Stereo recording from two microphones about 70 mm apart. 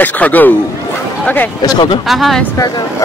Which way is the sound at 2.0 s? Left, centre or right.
Centre.